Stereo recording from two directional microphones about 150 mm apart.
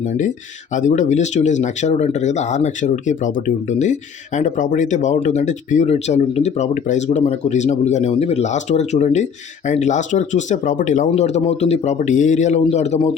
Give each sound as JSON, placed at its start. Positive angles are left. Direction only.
{"t": 0.2, "sound": "speech", "side_deg": 55}